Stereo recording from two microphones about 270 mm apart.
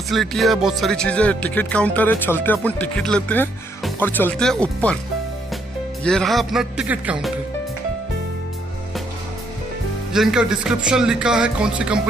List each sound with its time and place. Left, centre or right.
0.1 s speech: centre
6.0 s speech: centre
10.1 s speech: centre